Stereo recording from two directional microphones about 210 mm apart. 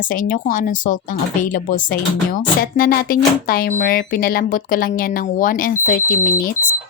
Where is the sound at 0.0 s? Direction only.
40° left (ahead or behind).